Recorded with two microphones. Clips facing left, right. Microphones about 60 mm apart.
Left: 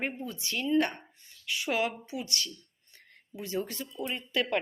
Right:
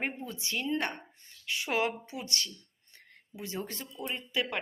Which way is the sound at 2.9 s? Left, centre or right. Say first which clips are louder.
Left 3 dB; right.